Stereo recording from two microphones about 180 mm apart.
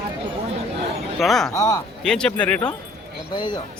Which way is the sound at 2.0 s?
5° left (ahead or behind).